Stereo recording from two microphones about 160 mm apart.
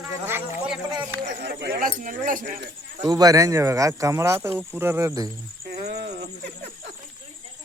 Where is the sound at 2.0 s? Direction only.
55° right (ahead or behind).